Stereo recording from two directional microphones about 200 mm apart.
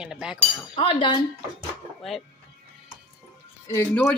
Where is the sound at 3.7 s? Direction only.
10° left (ahead or behind).